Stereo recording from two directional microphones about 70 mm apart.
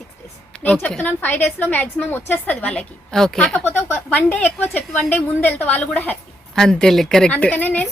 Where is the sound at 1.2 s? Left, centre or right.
Left; by 3.6 s centre.